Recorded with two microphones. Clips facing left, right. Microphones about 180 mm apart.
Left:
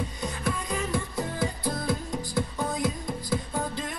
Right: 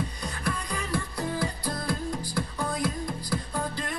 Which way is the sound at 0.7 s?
20° left (ahead or behind).